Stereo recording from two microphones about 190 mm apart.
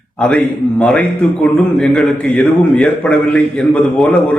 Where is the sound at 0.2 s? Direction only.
5° left (ahead or behind).